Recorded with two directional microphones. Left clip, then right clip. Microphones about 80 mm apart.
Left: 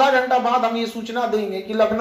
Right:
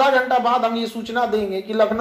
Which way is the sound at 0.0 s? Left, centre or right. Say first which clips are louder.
Even; right.